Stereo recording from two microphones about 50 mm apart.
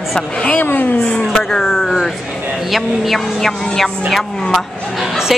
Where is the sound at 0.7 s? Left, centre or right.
Left.